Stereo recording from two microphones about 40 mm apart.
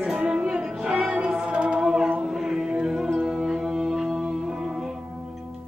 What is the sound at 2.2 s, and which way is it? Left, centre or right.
Music, centre.